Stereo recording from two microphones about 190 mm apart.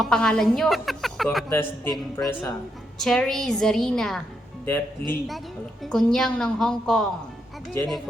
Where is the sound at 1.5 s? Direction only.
10° left (ahead or behind).